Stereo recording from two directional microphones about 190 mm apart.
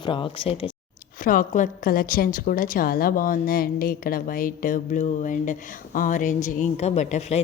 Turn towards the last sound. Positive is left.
turn(degrees=35)  # may be behind; listen again after turning